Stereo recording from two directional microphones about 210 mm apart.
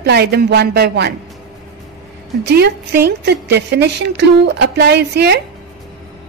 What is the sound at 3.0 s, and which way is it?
A woman's voice, 50° right (ahead or behind).